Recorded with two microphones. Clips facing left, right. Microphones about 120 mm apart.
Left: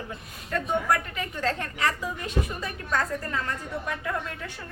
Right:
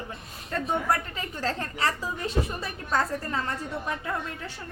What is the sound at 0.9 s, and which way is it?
A woman's voice, 30° right (ahead or behind).